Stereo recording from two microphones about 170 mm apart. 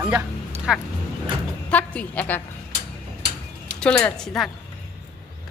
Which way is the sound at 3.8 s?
5° left (ahead or behind).